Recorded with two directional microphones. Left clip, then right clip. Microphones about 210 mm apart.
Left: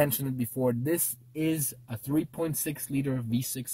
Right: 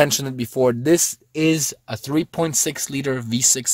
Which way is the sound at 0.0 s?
45° right (ahead or behind).